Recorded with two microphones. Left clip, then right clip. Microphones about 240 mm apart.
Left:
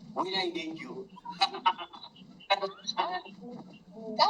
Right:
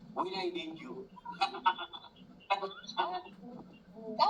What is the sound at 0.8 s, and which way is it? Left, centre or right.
A man's voice, left.